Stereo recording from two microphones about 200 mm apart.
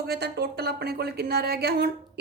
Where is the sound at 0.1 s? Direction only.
55° right (ahead or behind).